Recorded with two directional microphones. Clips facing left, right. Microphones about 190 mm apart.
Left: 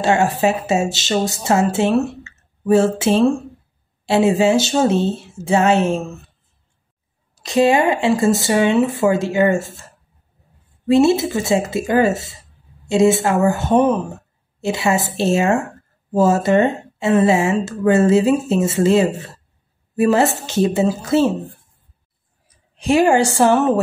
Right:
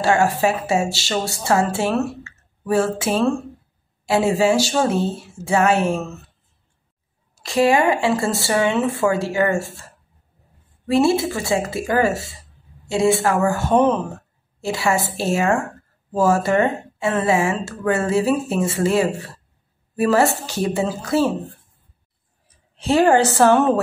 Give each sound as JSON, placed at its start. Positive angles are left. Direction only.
{"t": 0.0, "sound": "speech", "side_deg": 20}
{"t": 2.2, "sound": "a sound", "side_deg": 25}
{"t": 4.0, "sound": "speech", "side_deg": 25}
{"t": 7.4, "sound": "speech", "side_deg": 20}
{"t": 10.9, "sound": "speech", "side_deg": 20}
{"t": 22.8, "sound": "a woman's voice", "side_deg": 15}